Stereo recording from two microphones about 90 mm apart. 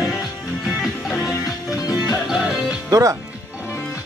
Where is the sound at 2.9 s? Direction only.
40° right (ahead or behind).